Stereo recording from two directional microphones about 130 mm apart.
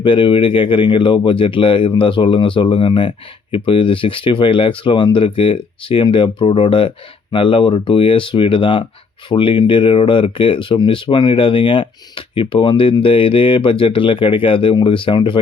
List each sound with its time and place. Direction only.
0.0 s speech: 40° left (ahead or behind)